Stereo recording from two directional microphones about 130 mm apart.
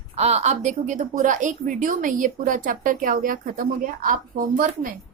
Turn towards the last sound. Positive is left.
turn(degrees=-90)